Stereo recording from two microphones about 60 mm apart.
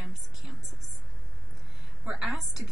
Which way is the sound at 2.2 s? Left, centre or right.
Centre.